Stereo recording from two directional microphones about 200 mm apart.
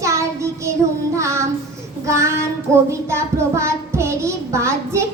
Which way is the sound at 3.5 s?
15° right (ahead or behind).